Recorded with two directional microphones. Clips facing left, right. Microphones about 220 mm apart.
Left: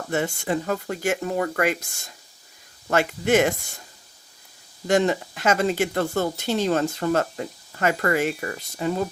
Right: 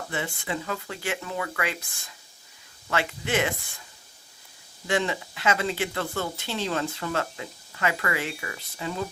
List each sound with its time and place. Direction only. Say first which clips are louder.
0.1 s speech: left 8 dB; 45° left (ahead or behind)
4.9 s speech: left 6 dB; 45° left (ahead or behind)